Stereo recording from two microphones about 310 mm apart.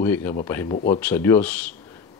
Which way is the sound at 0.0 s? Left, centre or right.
Centre.